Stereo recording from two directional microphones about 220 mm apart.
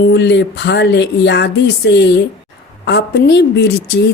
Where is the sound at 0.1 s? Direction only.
50° left (ahead or behind).